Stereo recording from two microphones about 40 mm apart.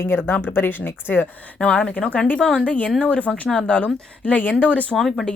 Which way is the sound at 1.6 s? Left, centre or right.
Left.